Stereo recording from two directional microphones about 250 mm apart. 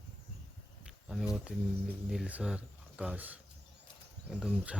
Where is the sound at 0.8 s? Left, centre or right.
Centre.